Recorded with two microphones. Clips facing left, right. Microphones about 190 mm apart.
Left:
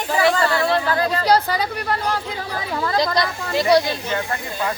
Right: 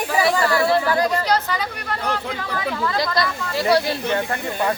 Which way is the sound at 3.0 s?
20° left (ahead or behind).